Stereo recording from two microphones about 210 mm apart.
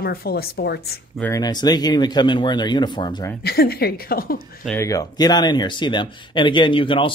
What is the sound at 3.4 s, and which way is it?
Speech, 50° left (ahead or behind).